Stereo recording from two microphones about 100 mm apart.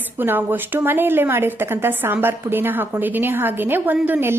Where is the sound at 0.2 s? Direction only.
20° right (ahead or behind).